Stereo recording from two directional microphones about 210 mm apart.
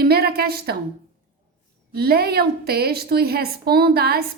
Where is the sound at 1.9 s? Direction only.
50° right (ahead or behind).